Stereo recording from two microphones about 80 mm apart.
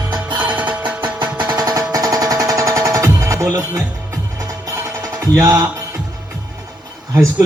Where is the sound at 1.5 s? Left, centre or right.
Right.